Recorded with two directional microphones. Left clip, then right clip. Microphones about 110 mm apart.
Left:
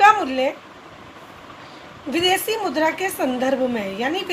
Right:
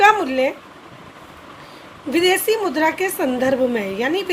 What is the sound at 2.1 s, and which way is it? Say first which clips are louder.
A woman's voice: right 3 dB; 70° right (ahead or behind).